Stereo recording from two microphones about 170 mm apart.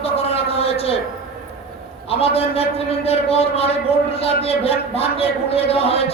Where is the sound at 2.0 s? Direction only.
35° left (ahead or behind).